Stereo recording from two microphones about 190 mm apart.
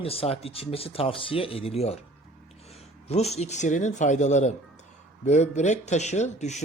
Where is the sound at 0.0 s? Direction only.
30° left (ahead or behind).